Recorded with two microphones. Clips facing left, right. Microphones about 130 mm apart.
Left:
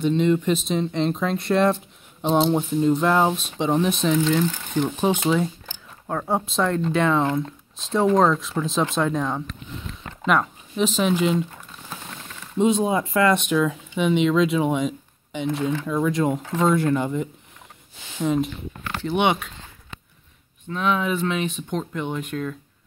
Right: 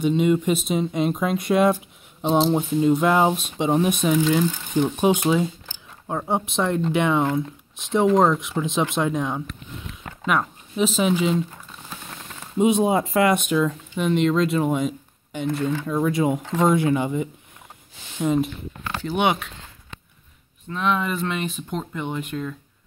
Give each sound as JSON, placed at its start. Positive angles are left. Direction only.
{"t": 0.0, "sound": "speech", "side_deg": -10}
{"t": 9.2, "sound": "speech", "side_deg": -5}
{"t": 12.7, "sound": "speech", "side_deg": -20}
{"t": 13.5, "sound": "speech", "side_deg": 0}
{"t": 20.6, "sound": "speech", "side_deg": 0}